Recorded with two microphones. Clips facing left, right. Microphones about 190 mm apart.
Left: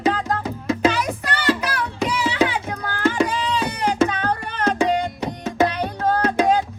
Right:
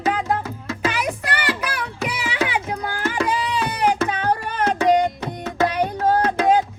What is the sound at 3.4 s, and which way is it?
Music, 10° right (ahead or behind).